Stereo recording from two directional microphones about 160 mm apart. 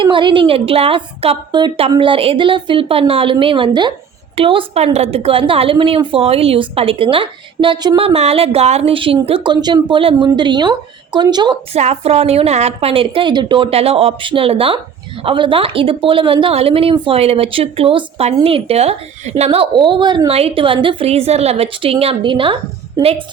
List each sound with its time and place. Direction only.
0.0 s a woman's voice: 30° right (ahead or behind)
11.7 s a woman's voice: 40° right (ahead or behind)